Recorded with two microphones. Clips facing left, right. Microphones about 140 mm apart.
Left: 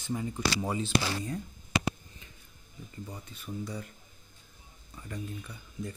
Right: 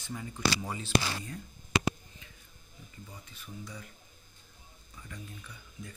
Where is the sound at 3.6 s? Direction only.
35° left (ahead or behind).